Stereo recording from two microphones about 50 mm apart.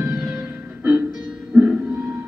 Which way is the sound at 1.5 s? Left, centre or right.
Centre.